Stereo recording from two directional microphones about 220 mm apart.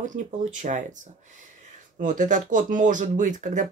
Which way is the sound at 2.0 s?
35° right (ahead or behind).